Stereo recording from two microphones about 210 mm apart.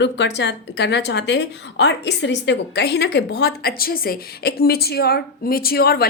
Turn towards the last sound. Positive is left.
turn(degrees=45)  # may be behind; listen again after turning